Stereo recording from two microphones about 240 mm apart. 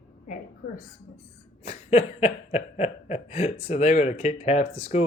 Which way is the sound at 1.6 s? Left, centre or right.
Left.